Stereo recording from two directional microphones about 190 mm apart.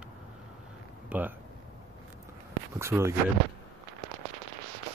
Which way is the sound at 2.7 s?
15° right (ahead or behind).